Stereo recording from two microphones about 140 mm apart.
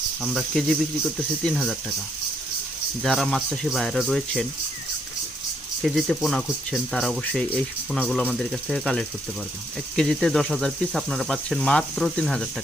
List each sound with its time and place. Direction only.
0.2 s speech: centre (ahead or behind)
3.0 s speech: centre (ahead or behind)
5.8 s speech: centre (ahead or behind)